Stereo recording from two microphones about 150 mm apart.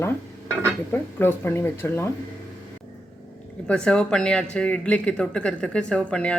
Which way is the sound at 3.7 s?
5° left (ahead or behind).